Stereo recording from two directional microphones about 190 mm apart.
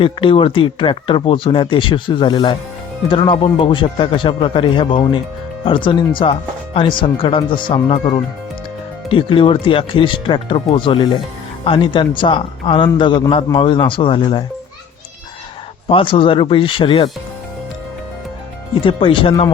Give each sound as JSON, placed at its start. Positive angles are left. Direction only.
{"t": 0.0, "sound": "a man's voice", "side_deg": 25}
{"t": 15.9, "sound": "a man's voice", "side_deg": 30}
{"t": 18.8, "sound": "a man's voice", "side_deg": 25}